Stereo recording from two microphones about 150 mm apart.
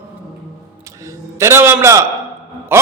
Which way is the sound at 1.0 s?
20° right (ahead or behind).